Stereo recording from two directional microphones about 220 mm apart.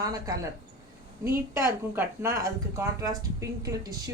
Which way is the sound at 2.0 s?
15° right (ahead or behind).